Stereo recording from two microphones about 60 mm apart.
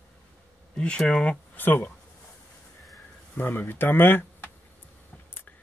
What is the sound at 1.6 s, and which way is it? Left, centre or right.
Speech, left.